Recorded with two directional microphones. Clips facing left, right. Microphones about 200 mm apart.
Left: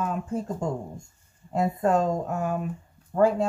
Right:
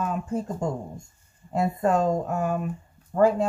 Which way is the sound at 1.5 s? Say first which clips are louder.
Even; 5° right (ahead or behind).